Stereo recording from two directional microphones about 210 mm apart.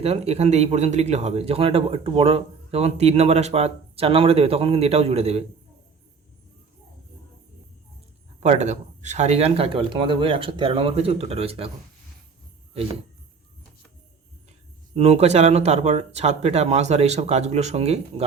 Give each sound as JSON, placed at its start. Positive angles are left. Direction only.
{"t": 0.0, "sound": "speech", "side_deg": -30}
{"t": 8.4, "sound": "speech", "side_deg": -35}
{"t": 14.9, "sound": "speech", "side_deg": -30}